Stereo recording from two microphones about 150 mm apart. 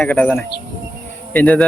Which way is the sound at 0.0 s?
10° left (ahead or behind).